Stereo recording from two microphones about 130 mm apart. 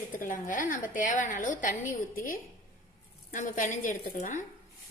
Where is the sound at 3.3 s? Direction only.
90° left; by 4.4 s 70° left (ahead or behind).